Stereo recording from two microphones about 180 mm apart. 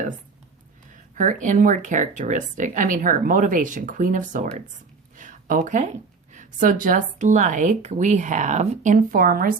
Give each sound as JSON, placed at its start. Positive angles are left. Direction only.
{"t": 1.1, "sound": "speech", "side_deg": -45}